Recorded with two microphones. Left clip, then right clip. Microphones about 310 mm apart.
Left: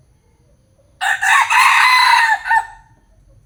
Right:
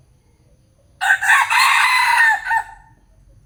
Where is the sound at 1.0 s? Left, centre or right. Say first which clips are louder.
Left 1 dB; centre.